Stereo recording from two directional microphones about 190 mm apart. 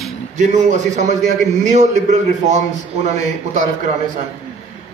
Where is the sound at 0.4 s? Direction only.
40° right (ahead or behind).